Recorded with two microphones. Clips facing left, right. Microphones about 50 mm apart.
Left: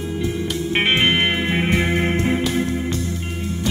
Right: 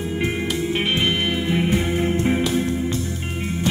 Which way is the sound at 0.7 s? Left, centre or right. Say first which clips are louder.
Left 6 dB; left.